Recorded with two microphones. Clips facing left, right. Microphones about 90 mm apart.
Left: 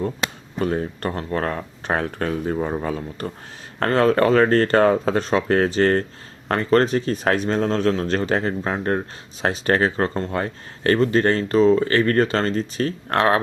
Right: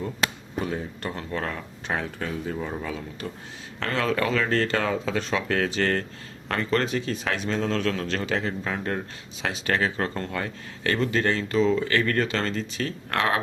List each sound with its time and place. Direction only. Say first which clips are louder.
0.6 s speech: left 7 dB; 55° left (ahead or behind); by 13.4 s 35° left (ahead or behind)